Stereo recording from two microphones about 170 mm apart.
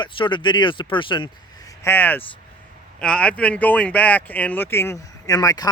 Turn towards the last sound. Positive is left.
turn(degrees=20)  # may be behind; listen again after turning